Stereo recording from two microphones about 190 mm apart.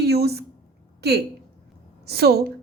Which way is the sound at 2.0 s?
55° right (ahead or behind).